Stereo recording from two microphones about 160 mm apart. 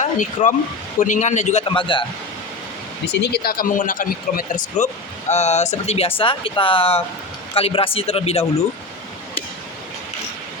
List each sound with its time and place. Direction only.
0.0 s a man's voice: 50° left (ahead or behind)
1.6 s speech: 30° left (ahead or behind)
3.2 s speech: 80° left; by 4.9 s 55° left (ahead or behind)
5.3 s speech: 45° left (ahead or behind)